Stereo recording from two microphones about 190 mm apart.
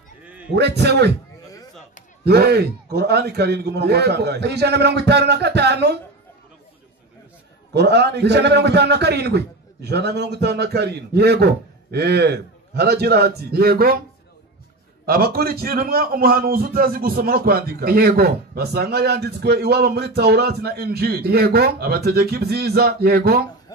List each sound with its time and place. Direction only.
0.2 s music: 10° right (ahead or behind)
0.6 s a man's voice: 60° right (ahead or behind)
2.2 s a man's voice: 55° right (ahead or behind)
7.7 s a man's voice: 60° right (ahead or behind)
15.0 s a man's voice: 55° right (ahead or behind)